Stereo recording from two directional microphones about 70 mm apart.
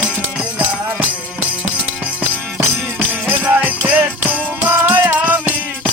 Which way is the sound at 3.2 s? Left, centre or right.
Right.